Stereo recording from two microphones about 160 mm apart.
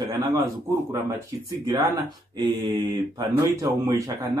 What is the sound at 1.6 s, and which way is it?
Speech, 20° right (ahead or behind).